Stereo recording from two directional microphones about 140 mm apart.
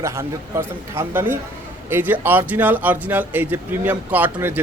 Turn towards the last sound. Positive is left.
turn(degrees=-10)  # may be behind; listen again after turning